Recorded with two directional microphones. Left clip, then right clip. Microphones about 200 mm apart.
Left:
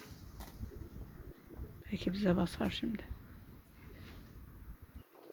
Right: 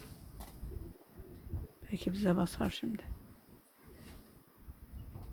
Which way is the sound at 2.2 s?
5° right (ahead or behind).